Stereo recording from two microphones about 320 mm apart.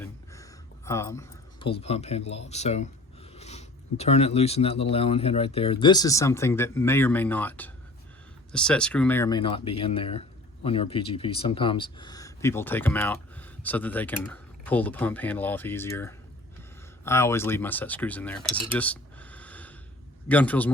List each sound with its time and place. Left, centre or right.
0.9 s a man's voice: centre